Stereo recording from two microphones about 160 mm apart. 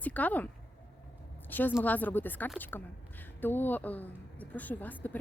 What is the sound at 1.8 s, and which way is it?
Speech, 10° left (ahead or behind).